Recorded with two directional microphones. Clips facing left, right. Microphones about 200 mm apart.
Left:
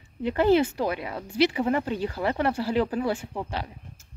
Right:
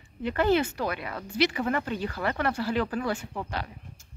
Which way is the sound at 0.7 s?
15° left (ahead or behind).